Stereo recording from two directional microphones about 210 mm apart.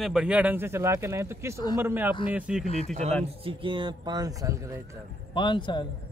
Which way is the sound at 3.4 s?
25° right (ahead or behind).